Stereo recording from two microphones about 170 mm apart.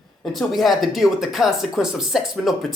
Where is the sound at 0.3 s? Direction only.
Centre (ahead or behind).